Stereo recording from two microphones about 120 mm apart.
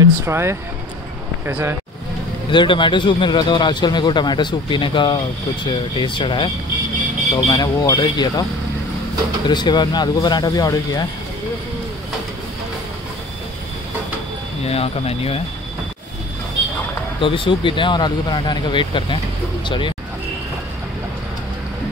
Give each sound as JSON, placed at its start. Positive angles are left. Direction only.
{"t": 0.0, "sound": "speech", "side_deg": -20}
{"t": 2.5, "sound": "speech", "side_deg": 40}
{"t": 7.4, "sound": "speech", "side_deg": 30}
{"t": 9.5, "sound": "speech", "side_deg": 35}
{"t": 14.6, "sound": "speech", "side_deg": 55}
{"t": 17.2, "sound": "speech", "side_deg": 45}